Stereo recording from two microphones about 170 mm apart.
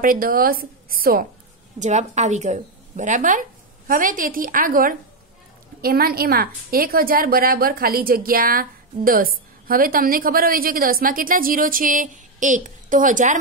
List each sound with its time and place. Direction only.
0.0 s a woman's voice: 55° right (ahead or behind)
1.8 s a woman's voice: 45° right (ahead or behind)